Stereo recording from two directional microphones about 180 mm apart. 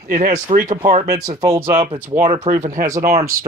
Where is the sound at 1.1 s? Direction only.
15° right (ahead or behind).